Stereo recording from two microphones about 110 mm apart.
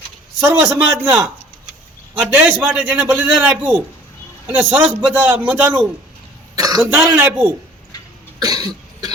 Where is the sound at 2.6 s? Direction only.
15° right (ahead or behind).